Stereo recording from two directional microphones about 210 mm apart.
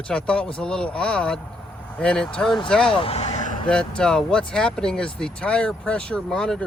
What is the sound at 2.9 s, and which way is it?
Vehicle, 25° left (ahead or behind).